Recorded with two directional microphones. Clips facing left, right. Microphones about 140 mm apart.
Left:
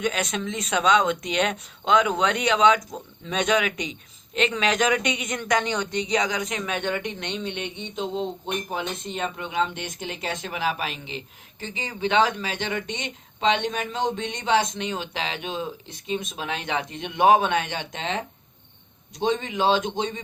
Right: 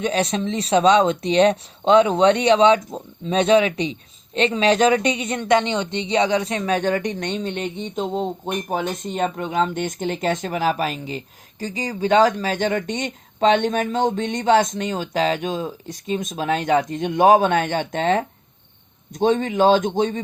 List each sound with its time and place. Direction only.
0.0 s speech: 30° right (ahead or behind)